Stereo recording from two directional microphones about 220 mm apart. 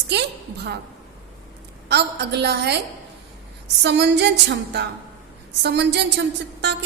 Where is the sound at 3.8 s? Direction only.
50° right (ahead or behind).